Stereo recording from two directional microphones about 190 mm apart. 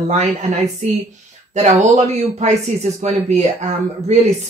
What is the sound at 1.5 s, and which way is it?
Speech, 35° right (ahead or behind).